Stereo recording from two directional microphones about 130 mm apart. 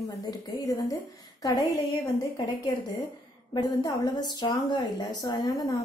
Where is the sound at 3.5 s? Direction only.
30° left (ahead or behind).